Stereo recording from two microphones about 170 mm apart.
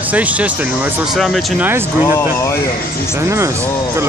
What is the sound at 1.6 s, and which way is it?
Speech, 15° right (ahead or behind).